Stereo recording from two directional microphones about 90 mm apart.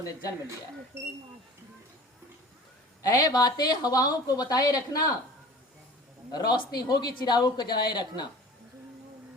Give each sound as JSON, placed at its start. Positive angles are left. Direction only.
{"t": 3.0, "sound": "speech", "side_deg": 40}
{"t": 6.3, "sound": "speech", "side_deg": 50}